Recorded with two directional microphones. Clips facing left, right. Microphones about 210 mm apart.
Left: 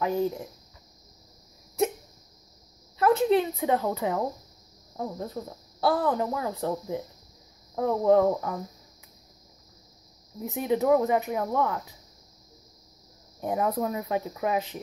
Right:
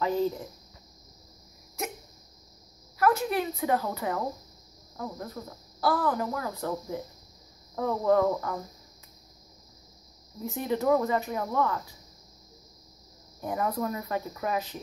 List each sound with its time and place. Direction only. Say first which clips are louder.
0.0 s speech: left 1 dB; 15° left (ahead or behind)
3.0 s speech: left 4 dB; 25° left (ahead or behind)
10.4 s speech: left 2 dB; 15° left (ahead or behind)
13.4 s speech: left 3 dB; 20° left (ahead or behind)